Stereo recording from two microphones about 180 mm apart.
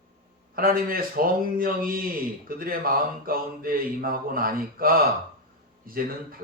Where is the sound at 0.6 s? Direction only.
50° right (ahead or behind).